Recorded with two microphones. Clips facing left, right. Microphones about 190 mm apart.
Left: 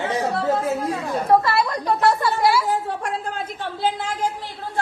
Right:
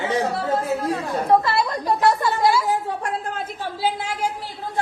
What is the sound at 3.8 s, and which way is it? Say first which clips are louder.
Speech: left 1 dB; 10° right (ahead or behind).